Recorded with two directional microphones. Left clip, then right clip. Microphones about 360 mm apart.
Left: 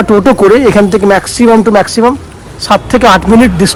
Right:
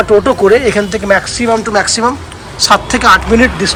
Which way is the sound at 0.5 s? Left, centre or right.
Centre.